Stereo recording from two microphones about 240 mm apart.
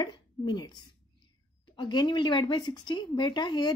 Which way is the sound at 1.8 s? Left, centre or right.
Centre.